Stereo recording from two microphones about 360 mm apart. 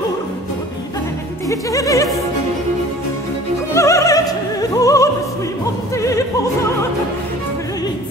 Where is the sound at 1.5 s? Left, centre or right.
Centre.